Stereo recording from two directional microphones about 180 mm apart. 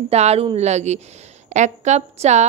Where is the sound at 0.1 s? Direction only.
35° right (ahead or behind).